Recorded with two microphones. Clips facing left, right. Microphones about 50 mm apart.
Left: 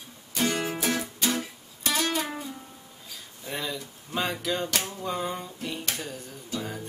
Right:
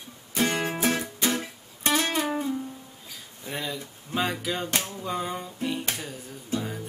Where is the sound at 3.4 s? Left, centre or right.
Centre.